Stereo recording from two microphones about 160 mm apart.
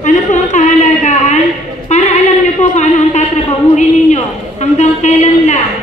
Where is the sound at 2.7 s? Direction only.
45° left (ahead or behind).